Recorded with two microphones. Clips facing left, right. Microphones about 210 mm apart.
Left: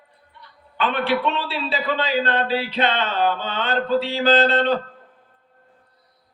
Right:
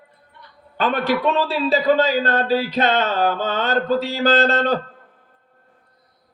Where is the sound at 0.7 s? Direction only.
45° right (ahead or behind).